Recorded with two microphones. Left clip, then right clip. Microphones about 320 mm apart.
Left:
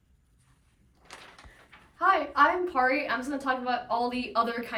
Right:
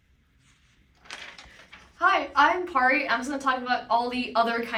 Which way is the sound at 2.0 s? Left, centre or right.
Centre.